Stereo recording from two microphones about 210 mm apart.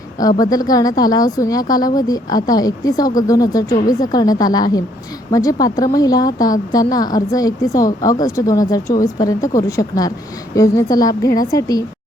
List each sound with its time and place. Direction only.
0.2 s a woman's voice: 15° left (ahead or behind)